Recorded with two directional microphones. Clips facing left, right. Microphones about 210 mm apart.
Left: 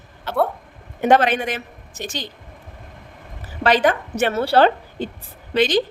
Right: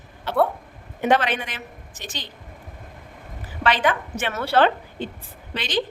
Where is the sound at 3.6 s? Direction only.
40° left (ahead or behind).